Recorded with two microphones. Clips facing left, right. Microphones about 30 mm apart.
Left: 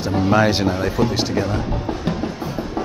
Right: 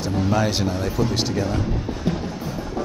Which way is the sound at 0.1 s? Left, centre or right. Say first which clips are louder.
Left 6 dB; left.